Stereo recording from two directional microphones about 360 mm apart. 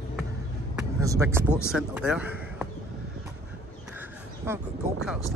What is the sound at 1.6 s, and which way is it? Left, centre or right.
Speech, centre.